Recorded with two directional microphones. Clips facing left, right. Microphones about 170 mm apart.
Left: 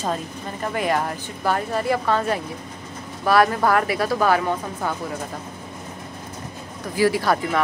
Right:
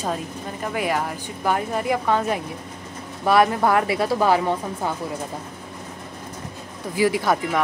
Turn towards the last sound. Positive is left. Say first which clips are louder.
# even
turn(degrees=-15)  # may be behind; listen again after turning